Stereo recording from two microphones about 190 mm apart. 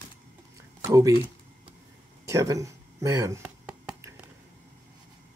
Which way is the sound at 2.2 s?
15° right (ahead or behind).